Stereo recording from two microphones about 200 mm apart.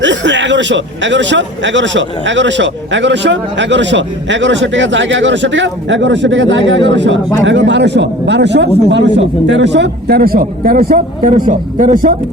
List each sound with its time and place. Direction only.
0.0 s a man's voice: 65° right (ahead or behind); by 12.1 s 40° right (ahead or behind)